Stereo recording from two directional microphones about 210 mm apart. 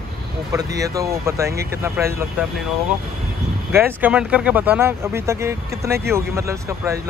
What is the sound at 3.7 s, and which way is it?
Speech, 10° right (ahead or behind).